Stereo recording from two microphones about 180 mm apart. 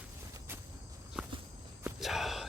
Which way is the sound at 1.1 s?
5° right (ahead or behind).